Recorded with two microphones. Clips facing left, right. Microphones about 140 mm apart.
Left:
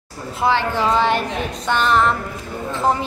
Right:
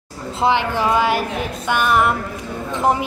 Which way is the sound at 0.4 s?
15° right (ahead or behind).